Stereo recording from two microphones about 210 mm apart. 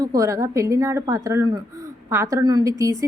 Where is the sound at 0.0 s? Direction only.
15° right (ahead or behind).